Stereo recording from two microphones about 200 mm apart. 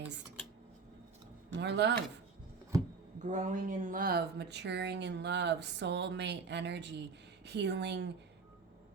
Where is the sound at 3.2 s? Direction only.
40° right (ahead or behind); by 8.1 s 60° right (ahead or behind).